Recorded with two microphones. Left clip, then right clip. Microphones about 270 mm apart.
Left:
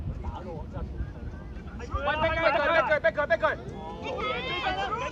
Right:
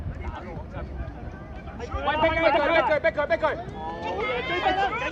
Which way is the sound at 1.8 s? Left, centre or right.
Right.